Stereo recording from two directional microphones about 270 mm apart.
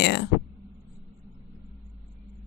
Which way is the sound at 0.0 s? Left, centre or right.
Left.